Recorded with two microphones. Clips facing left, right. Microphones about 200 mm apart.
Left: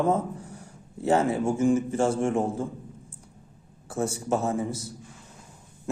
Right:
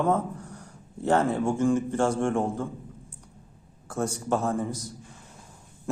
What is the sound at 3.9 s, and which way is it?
A man's voice, 5° left (ahead or behind).